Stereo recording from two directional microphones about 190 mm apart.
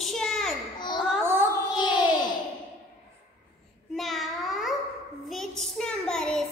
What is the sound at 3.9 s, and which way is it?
Babbling, centre (ahead or behind).